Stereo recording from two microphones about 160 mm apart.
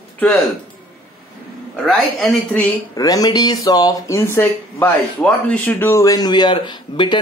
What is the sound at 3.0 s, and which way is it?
Speech, 25° left (ahead or behind).